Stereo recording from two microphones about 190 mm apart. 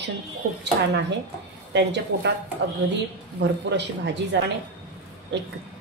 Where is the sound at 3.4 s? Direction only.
65° right (ahead or behind).